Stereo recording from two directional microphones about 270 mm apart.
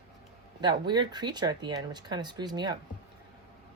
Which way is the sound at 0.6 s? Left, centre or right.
Centre.